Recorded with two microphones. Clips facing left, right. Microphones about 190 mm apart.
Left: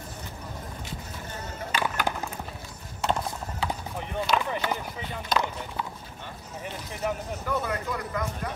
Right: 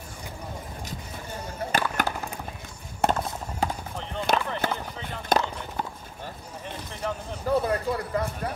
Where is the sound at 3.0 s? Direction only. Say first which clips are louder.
Right 3 dB; 45° right (ahead or behind).